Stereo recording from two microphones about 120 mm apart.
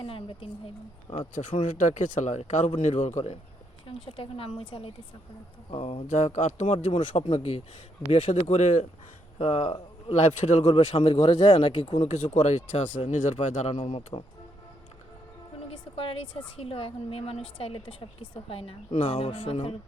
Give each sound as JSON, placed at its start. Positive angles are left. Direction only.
{"t": 0.0, "sound": "a woman's voice", "side_deg": 50}
{"t": 1.4, "sound": "speech", "side_deg": 90}
{"t": 3.8, "sound": "a woman's voice", "side_deg": 50}
{"t": 7.1, "sound": "a man's voice", "side_deg": 55}
{"t": 8.1, "sound": "speech", "side_deg": 75}
{"t": 9.4, "sound": "a man's voice", "side_deg": 60}
{"t": 10.9, "sound": "a woman's voice", "side_deg": 45}
{"t": 12.0, "sound": "speech", "side_deg": 85}
{"t": 16.0, "sound": "a woman's voice", "side_deg": 50}
{"t": 18.9, "sound": "speech", "side_deg": 90}
{"t": 19.5, "sound": "a woman's voice", "side_deg": 55}